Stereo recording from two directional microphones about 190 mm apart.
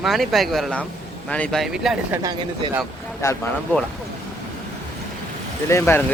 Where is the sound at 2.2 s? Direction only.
20° right (ahead or behind).